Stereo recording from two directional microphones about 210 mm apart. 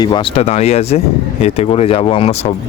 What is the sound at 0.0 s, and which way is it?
Speech, 20° left (ahead or behind).